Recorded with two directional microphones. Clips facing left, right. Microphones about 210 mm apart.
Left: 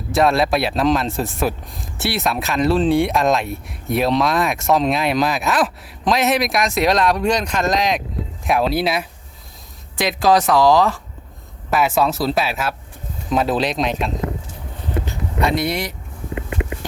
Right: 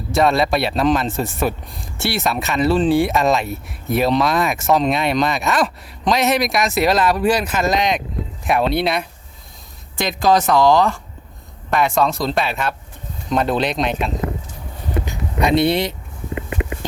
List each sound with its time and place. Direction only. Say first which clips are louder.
0.1 s speech: even; centre (ahead or behind)
15.0 s a sound: right 1 dB; 15° right (ahead or behind)
15.6 s speech: right 5 dB; 25° right (ahead or behind)